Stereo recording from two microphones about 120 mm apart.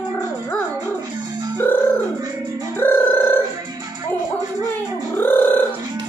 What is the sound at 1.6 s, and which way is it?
Music, 20° left (ahead or behind).